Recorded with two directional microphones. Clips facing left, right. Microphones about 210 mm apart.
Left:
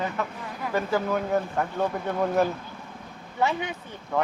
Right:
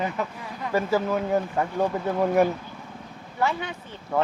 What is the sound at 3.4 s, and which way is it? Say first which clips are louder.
Speech: even; 20° left (ahead or behind).